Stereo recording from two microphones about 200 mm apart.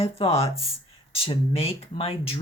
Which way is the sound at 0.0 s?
30° left (ahead or behind).